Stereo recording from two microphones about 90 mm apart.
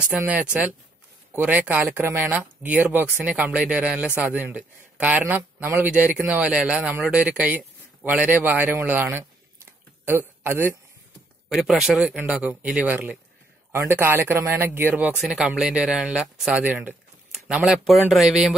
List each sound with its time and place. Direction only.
0.1 s a man's voice: 15° right (ahead or behind)
11.4 s speech: 5° right (ahead or behind)
12.2 s speech: 15° right (ahead or behind)
13.7 s speech: 25° right (ahead or behind)
15.1 s speech: 5° right (ahead or behind)
16.6 s speech: 20° right (ahead or behind)
17.3 s speech: 5° right (ahead or behind)